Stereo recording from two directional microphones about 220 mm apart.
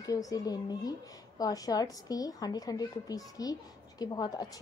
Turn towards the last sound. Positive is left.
turn(degrees=20)  # may be behind; listen again after turning